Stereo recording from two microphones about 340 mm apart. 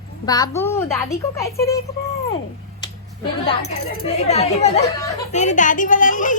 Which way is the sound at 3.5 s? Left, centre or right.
Centre.